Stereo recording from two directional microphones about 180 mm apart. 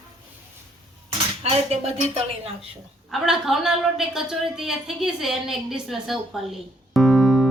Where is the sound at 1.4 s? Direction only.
35° right (ahead or behind).